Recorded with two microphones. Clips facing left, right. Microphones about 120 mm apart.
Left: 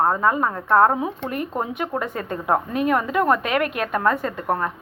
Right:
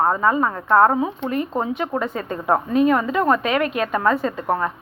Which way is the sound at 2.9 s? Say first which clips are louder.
Right 1 dB; 10° left (ahead or behind).